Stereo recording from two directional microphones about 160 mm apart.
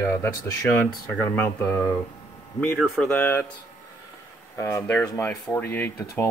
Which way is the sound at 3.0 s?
10° left (ahead or behind).